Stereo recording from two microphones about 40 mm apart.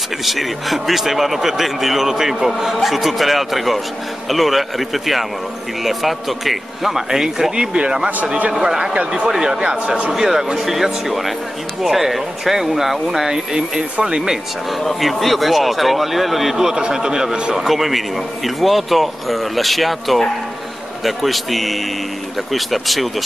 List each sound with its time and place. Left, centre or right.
0.2 s a man's voice: centre
7.5 s speech: right
9.3 s speech: centre
9.6 s speech: right
10.1 s a man's voice: centre
14.8 s a man's voice: centre
16.5 s a man's voice: centre